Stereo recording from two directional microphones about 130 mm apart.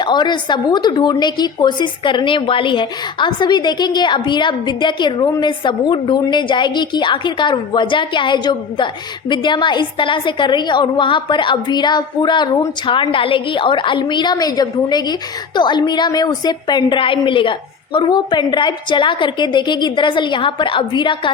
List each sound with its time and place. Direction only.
0.0 s speech: 35° left (ahead or behind)